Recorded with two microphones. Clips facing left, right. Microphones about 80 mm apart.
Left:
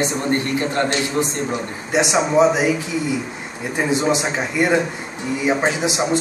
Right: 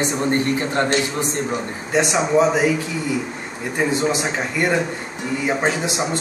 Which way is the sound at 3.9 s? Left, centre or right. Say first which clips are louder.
Left 5 dB; centre.